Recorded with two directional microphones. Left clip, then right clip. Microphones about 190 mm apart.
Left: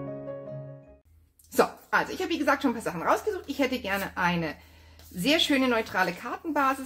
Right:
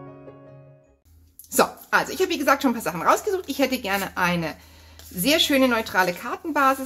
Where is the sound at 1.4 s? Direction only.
20° right (ahead or behind).